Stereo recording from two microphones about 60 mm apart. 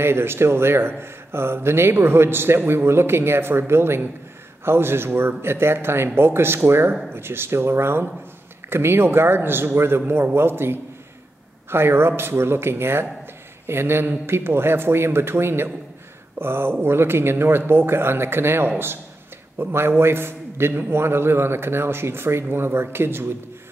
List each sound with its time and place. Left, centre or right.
0.0 s a man's voice: right